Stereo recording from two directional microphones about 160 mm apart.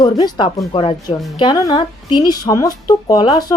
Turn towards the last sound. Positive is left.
turn(degrees=25)  # may be behind; listen again after turning